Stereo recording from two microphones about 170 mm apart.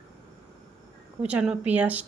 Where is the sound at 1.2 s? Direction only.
5° right (ahead or behind).